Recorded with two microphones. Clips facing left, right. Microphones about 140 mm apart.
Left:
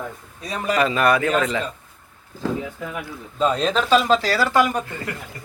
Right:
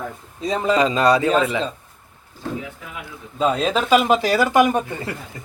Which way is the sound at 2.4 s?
90° left.